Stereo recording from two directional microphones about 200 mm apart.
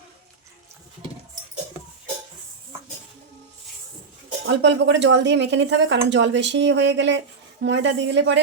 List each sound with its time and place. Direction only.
4.4 s a woman's voice: 65° right (ahead or behind)